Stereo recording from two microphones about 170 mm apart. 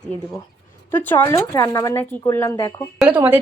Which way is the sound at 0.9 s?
10° left (ahead or behind).